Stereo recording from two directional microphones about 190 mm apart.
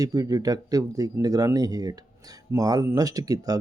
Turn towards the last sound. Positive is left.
turn(degrees=-20)  # may be behind; listen again after turning